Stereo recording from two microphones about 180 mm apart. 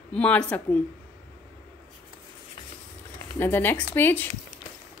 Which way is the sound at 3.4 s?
10° left (ahead or behind).